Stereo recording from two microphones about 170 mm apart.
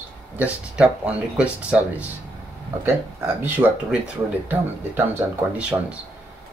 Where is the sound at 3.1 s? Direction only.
15° right (ahead or behind).